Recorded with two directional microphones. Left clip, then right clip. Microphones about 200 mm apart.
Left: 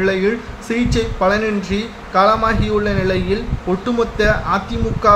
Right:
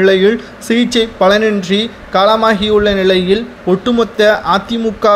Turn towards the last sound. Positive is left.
turn(degrees=-35)  # may be behind; listen again after turning